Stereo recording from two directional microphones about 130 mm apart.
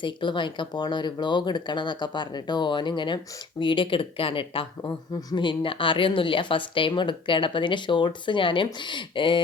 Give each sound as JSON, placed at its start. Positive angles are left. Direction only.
{"t": 0.0, "sound": "speech", "side_deg": 40}